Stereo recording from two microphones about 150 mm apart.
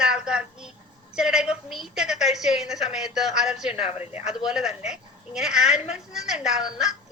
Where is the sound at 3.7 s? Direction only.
45° left (ahead or behind).